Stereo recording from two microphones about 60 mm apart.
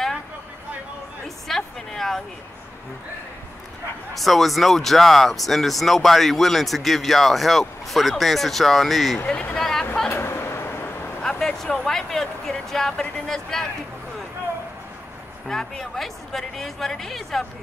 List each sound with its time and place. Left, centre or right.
1.5 s a sound: centre
4.1 s speech: centre
9.3 s speech: centre
10.0 s a sound: left
11.2 s speech: centre
15.4 s speech: centre